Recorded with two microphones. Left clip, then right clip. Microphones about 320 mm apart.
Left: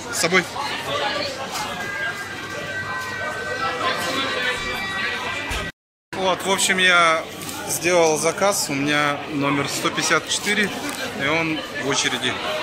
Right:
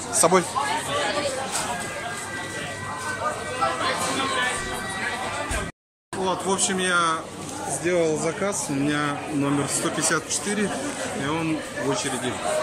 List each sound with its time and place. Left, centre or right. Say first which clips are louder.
0.2 s speech: right 1 dB; centre
6.2 s speech: left 5 dB; centre
7.9 s speech: left 6 dB; left
8.5 s speech: left 5 dB; centre